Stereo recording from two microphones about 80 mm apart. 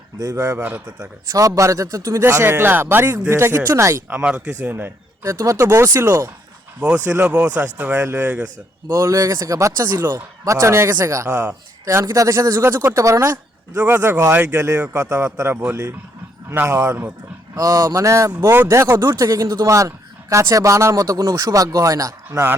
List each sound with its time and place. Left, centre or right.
0.2 s speech: right
0.6 s speech: centre
1.3 s speech: right
4.1 s speech: centre; by 6.3 s right
6.7 s speech: centre
8.9 s speech: right
11.3 s speech: right
11.9 s speech: right
13.7 s speech: right
14.6 s speech: right
17.5 s speech: right
19.2 s speech: right